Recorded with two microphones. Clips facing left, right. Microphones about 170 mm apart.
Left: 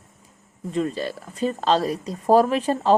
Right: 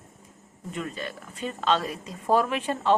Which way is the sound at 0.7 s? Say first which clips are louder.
Left 9 dB; 30° left (ahead or behind).